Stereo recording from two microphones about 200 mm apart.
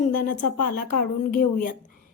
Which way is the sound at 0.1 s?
45° left (ahead or behind).